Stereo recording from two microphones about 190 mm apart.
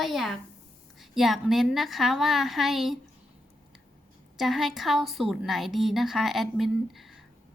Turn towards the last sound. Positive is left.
turn(degrees=0)  # may be behind; listen again after turning